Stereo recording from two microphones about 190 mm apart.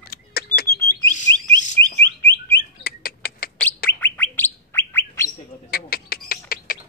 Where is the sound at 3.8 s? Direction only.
10° left (ahead or behind).